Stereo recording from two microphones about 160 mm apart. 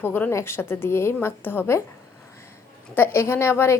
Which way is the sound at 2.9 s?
15° left (ahead or behind).